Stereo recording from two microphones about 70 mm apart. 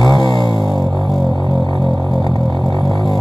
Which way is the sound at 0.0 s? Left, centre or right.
Left.